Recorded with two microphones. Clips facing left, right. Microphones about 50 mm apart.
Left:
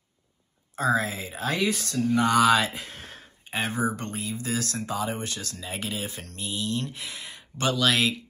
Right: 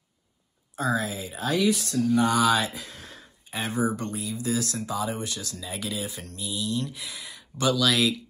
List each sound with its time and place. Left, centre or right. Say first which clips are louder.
0.7 s speech: left 2 dB; left